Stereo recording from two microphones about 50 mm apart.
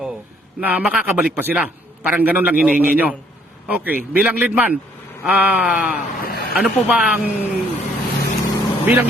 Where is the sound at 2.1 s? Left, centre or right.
Right.